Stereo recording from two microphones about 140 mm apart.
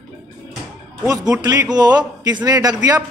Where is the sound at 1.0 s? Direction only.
25° right (ahead or behind).